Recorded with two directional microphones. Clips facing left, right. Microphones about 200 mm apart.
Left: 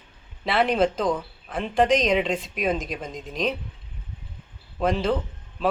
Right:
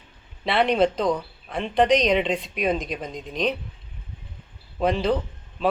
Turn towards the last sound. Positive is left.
turn(degrees=0)  # may be behind; listen again after turning